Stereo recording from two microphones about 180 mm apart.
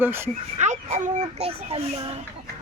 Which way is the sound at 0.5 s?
40° right (ahead or behind).